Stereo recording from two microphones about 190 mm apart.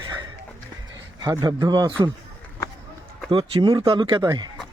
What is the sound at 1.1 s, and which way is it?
Speech, 20° right (ahead or behind).